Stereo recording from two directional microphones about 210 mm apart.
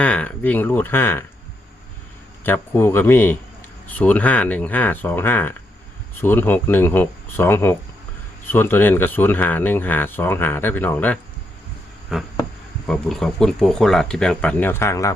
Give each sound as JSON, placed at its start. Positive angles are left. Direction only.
{"t": 0.0, "sound": "speech", "side_deg": 5}
{"t": 2.4, "sound": "speech", "side_deg": 10}